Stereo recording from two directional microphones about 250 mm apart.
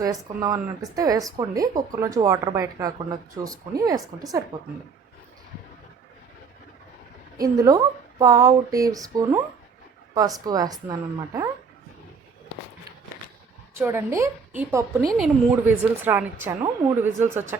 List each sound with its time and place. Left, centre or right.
0.3 s a woman's voice: centre
7.3 s a woman's voice: centre
13.7 s a woman's voice: centre